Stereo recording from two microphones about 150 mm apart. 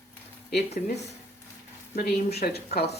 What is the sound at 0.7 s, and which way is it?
Speech, 50° left (ahead or behind).